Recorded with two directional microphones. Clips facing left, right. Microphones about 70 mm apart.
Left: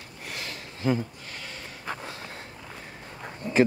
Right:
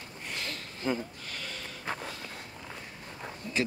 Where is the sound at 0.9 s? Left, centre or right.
Centre.